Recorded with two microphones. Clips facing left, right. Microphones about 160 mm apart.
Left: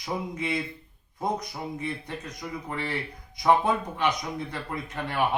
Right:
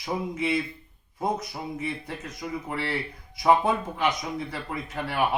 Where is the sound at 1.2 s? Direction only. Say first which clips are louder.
Right 1 dB; 5° right (ahead or behind).